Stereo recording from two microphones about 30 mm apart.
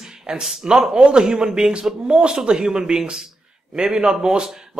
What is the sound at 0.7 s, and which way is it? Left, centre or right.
A man's voice, right.